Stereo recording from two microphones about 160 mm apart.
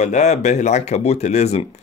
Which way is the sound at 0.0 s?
45° left (ahead or behind).